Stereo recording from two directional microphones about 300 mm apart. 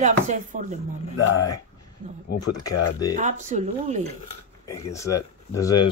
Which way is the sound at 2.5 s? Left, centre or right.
Centre.